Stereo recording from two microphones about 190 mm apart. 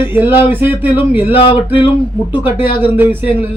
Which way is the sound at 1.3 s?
30° left (ahead or behind).